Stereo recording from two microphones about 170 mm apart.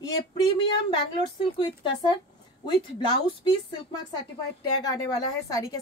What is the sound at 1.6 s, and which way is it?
Speech, 25° left (ahead or behind).